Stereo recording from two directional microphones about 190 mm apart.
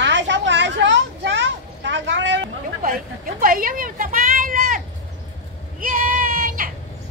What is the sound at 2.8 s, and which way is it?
A woman's voice, 50° right (ahead or behind).